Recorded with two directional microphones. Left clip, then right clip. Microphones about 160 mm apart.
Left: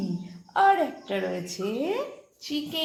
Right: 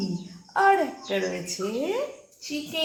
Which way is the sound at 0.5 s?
5° left (ahead or behind).